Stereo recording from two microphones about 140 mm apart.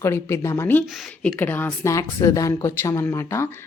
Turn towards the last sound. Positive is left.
turn(degrees=20)  # may be behind; listen again after turning